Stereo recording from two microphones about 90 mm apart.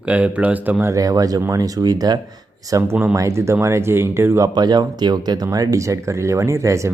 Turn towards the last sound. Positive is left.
turn(degrees=-35)  # may be behind; listen again after turning